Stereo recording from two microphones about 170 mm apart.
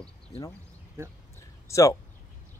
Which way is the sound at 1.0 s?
15° right (ahead or behind).